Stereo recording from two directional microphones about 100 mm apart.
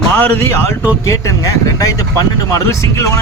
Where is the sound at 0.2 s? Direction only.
25° left (ahead or behind).